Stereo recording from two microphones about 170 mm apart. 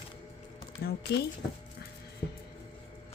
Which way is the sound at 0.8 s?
70° left (ahead or behind).